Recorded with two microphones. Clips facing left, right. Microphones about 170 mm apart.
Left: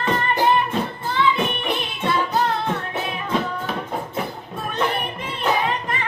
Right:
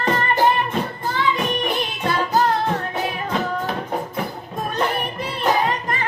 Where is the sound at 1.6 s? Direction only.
40° right (ahead or behind).